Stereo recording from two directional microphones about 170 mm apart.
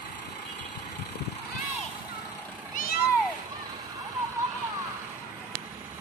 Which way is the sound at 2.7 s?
60° left (ahead or behind).